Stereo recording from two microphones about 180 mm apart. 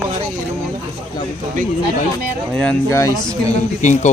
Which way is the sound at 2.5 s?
5° left (ahead or behind).